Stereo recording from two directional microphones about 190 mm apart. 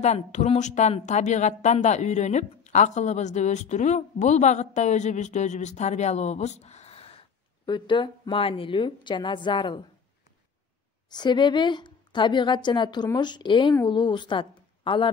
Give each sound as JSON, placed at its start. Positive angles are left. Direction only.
{"t": 0.0, "sound": "a woman's voice", "side_deg": 35}
{"t": 11.1, "sound": "a woman's voice", "side_deg": 25}